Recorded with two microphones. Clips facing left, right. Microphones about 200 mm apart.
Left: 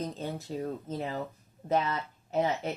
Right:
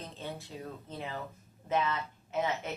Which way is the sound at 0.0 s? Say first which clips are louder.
Left 7 dB; 40° left (ahead or behind).